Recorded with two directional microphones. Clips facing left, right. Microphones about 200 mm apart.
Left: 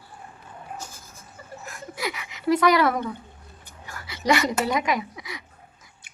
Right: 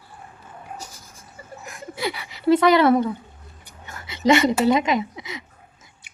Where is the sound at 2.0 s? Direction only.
35° right (ahead or behind).